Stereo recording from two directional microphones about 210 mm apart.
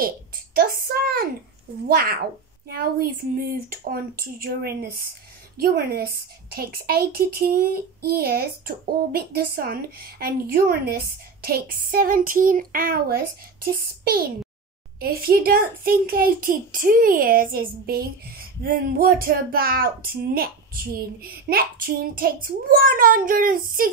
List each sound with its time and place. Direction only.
0.6 s a woman's voice: 45° right (ahead or behind)